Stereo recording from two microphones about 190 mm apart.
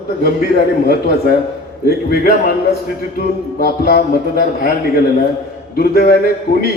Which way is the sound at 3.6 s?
55° left (ahead or behind).